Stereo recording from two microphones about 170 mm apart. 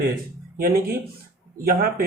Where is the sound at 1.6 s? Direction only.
55° right (ahead or behind).